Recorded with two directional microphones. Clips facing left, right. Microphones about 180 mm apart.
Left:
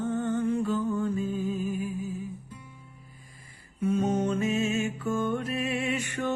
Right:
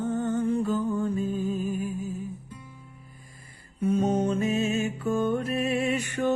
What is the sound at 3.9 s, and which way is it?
Music, 35° right (ahead or behind).